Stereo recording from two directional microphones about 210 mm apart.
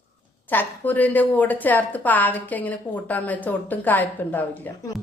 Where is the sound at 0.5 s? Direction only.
10° left (ahead or behind).